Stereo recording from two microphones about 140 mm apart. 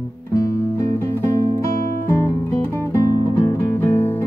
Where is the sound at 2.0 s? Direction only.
20° left (ahead or behind).